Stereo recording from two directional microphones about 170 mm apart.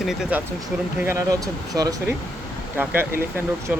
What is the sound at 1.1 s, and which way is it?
Speech, 20° right (ahead or behind).